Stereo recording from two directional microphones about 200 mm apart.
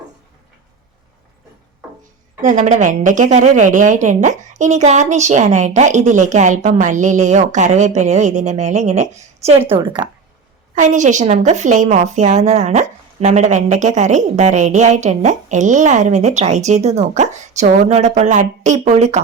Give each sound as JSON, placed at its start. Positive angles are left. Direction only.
{"t": 2.4, "sound": "a woman's voice", "side_deg": -40}
{"t": 10.8, "sound": "a woman's voice", "side_deg": -40}